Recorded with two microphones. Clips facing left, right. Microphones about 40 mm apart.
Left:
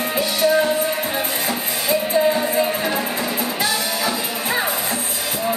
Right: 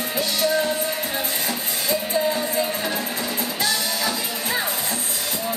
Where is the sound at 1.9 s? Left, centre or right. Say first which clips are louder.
Left 5 dB; centre.